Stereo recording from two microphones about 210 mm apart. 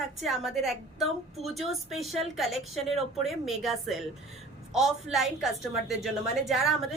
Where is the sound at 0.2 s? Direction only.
Centre (ahead or behind).